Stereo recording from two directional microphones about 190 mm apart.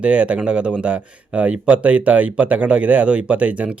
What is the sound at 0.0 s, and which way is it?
Speech, 5° right (ahead or behind).